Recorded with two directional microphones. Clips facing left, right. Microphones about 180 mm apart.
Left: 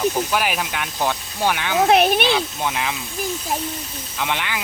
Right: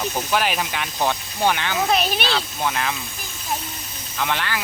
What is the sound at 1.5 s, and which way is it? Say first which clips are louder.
Speech: right 1 dB; 10° left (ahead or behind).